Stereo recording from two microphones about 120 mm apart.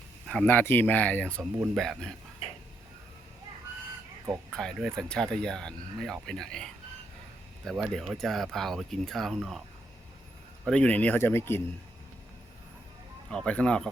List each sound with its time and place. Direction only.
0.4 s speech: 20° left (ahead or behind)
4.5 s speech: 5° left (ahead or behind)
10.7 s speech: 10° left (ahead or behind)
13.3 s speech: 10° left (ahead or behind)